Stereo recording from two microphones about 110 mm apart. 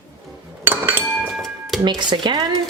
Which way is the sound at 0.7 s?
15° right (ahead or behind).